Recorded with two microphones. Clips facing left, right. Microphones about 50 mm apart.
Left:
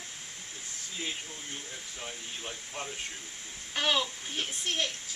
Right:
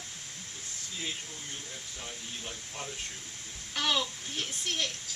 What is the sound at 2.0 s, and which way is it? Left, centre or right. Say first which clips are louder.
Speech: left 2 dB; centre.